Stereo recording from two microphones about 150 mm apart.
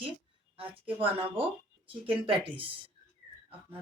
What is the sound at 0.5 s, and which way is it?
Speech, 35° right (ahead or behind).